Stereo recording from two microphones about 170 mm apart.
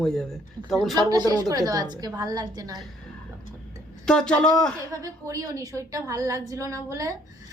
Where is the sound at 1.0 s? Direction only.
25° right (ahead or behind).